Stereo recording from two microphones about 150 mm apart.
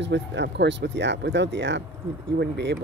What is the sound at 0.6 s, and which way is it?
Speech, 90° right.